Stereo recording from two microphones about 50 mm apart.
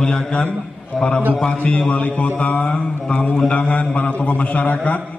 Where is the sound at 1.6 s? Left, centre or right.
Left.